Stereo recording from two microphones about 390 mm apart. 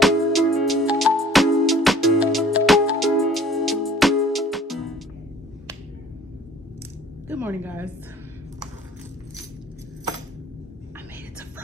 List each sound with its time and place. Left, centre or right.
0.0 s music: centre
7.2 s a woman's voice: centre